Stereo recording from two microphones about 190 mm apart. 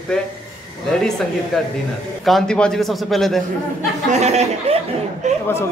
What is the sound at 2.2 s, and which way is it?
A man's voice, centre (ahead or behind).